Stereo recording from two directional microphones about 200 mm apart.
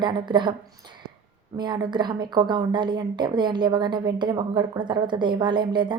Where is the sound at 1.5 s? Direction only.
20° right (ahead or behind).